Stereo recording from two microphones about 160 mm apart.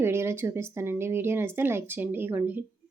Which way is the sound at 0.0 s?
15° right (ahead or behind).